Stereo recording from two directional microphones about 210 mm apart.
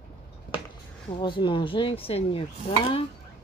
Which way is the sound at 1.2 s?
20° left (ahead or behind).